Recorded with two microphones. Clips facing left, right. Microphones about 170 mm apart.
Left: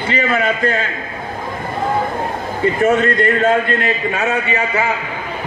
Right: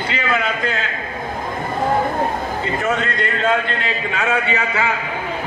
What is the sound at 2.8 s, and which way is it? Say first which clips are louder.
Speech: left 9 dB; 50° left (ahead or behind).